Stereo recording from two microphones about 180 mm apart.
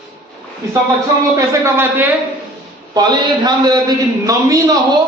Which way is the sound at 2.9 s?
25° right (ahead or behind).